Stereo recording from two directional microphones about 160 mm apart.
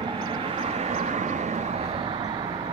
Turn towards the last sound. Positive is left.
turn(degrees=-45)  # may be behind; listen again after turning